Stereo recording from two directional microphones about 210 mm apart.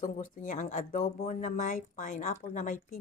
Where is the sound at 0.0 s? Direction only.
40° left (ahead or behind).